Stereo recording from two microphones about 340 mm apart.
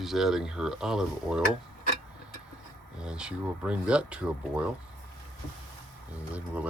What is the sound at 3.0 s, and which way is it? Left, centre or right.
Speech, centre.